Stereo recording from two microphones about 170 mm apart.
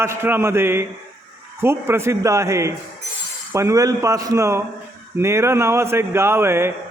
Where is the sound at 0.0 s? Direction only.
15° right (ahead or behind).